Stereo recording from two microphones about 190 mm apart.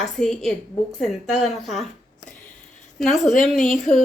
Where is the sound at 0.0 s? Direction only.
Centre (ahead or behind).